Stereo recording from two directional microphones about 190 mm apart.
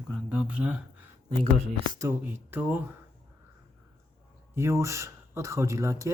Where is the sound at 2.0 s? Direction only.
10° right (ahead or behind).